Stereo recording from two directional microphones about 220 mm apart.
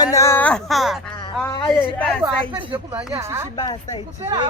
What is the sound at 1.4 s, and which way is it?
Speech, 20° left (ahead or behind).